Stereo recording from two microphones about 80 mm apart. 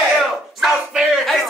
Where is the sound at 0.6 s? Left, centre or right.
Centre.